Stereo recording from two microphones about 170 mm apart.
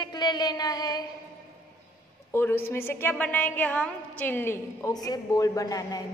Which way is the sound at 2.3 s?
15° left (ahead or behind).